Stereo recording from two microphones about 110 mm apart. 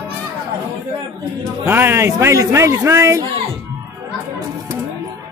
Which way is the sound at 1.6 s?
20° right (ahead or behind).